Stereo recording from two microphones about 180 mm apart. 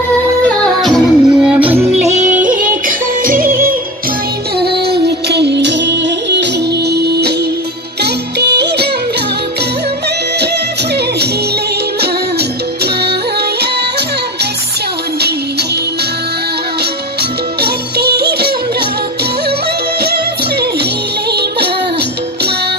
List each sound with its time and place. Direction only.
0.8 s music: centre (ahead or behind)
2.0 s yodeling: 40° right (ahead or behind)
2.4 s music: 45° right (ahead or behind); by 8.8 s 65° right (ahead or behind)
12.0 s music: 65° right (ahead or behind)
17.2 s music: 60° right (ahead or behind)
21.3 s music: 65° right (ahead or behind)